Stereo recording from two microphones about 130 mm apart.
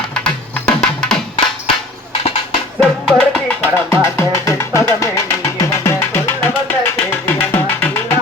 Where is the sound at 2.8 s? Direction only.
5° left (ahead or behind).